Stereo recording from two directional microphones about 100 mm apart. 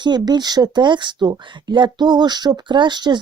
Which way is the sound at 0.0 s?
45° right (ahead or behind).